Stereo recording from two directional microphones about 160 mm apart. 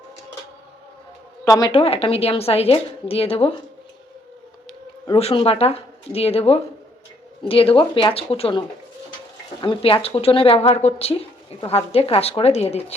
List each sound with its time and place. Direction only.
1.5 s a woman's voice: 20° left (ahead or behind)
1.7 s a woman's voice: 40° left (ahead or behind)
5.1 s a woman's voice: 35° left (ahead or behind)